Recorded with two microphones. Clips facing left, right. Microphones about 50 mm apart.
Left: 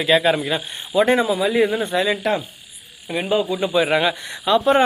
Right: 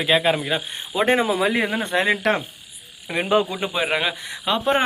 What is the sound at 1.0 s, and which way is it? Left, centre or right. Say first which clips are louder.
Speech: left 1 dB; right.